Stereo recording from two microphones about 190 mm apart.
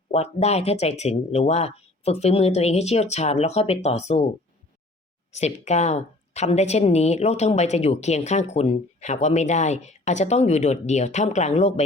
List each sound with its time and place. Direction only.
0.1 s a woman's voice: 35° left (ahead or behind)
5.3 s a woman's voice: 35° left (ahead or behind)